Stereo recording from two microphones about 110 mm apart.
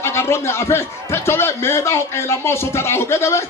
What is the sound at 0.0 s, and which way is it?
A man's voice, 25° left (ahead or behind).